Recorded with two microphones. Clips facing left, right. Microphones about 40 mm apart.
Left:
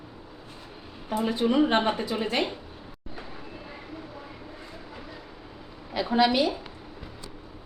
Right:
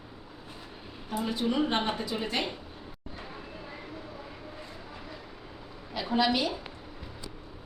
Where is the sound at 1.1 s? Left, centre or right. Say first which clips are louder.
Left 5 dB; centre.